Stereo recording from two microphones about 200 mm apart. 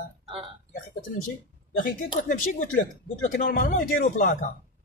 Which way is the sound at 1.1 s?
50° left (ahead or behind).